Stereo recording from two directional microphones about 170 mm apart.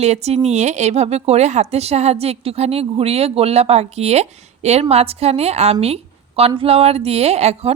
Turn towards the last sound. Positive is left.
turn(degrees=-40)  # may be behind; listen again after turning